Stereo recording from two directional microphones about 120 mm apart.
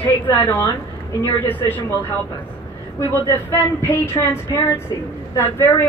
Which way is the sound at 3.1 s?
20° left (ahead or behind).